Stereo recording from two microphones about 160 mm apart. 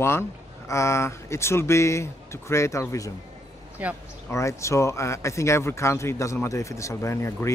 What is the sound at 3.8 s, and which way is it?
Speech, 10° right (ahead or behind).